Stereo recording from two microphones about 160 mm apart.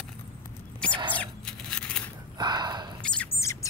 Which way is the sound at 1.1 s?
5° left (ahead or behind).